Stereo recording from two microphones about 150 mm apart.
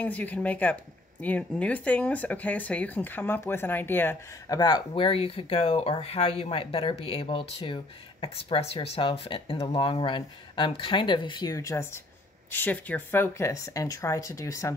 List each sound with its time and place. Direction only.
0.0 s speech: 10° left (ahead or behind)
4.6 s speech: 30° left (ahead or behind)